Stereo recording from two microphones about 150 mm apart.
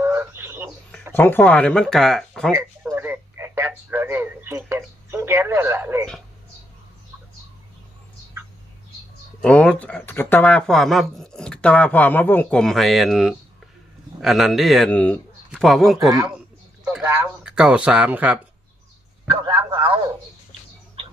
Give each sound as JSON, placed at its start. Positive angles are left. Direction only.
{"t": 0.0, "sound": "frog", "side_deg": -15}
{"t": 1.1, "sound": "speech", "side_deg": 15}
{"t": 2.9, "sound": "speech", "side_deg": -15}
{"t": 9.4, "sound": "speech", "side_deg": 5}
{"t": 16.0, "sound": "speech", "side_deg": -25}
{"t": 16.8, "sound": "speech", "side_deg": -10}
{"t": 19.7, "sound": "a sound", "side_deg": -35}